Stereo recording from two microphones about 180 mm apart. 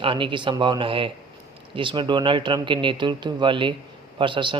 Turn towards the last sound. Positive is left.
turn(degrees=-25)  # may be behind; listen again after turning